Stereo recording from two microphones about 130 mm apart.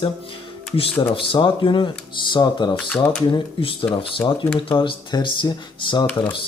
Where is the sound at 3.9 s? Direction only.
40° left (ahead or behind).